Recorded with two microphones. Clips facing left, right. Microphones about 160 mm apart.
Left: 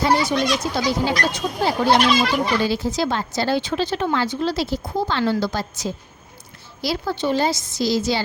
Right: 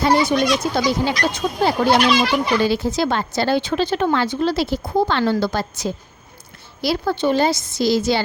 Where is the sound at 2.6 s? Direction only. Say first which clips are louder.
Right 2 dB; 60° right (ahead or behind).